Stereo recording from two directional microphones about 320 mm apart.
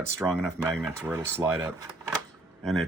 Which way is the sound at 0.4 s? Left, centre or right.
Centre.